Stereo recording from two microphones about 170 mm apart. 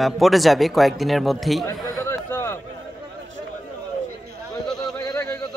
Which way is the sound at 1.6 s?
20° left (ahead or behind).